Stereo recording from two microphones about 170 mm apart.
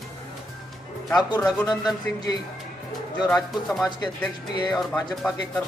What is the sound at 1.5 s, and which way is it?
Speech, centre (ahead or behind).